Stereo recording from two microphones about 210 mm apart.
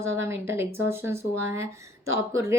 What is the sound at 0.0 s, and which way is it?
Speech, 10° right (ahead or behind).